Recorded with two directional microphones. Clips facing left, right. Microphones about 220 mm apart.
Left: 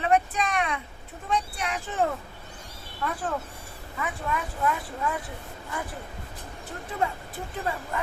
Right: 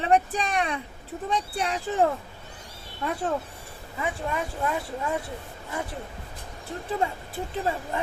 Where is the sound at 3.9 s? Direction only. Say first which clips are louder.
Right 2 dB; 25° right (ahead or behind).